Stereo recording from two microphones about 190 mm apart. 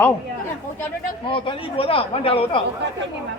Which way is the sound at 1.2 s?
25° left (ahead or behind).